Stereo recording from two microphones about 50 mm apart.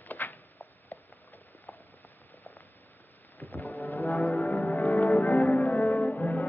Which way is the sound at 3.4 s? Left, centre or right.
Left.